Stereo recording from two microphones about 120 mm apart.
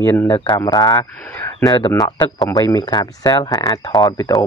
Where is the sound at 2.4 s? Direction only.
30° left (ahead or behind).